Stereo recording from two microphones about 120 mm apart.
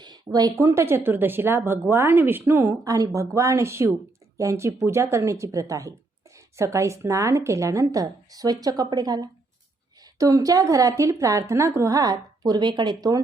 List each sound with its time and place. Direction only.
0.0 s a woman's voice: 35° right (ahead or behind)
2.8 s a woman's voice: 30° right (ahead or behind)